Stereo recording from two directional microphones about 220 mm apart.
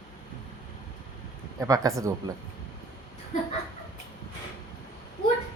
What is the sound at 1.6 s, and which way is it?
Speech, 15° right (ahead or behind).